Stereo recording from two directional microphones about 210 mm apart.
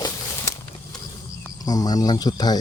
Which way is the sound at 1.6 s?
20° left (ahead or behind).